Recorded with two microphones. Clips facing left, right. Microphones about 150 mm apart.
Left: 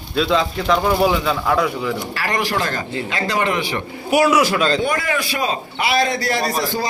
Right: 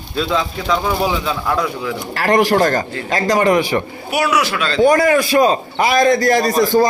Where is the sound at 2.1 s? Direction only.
55° right (ahead or behind).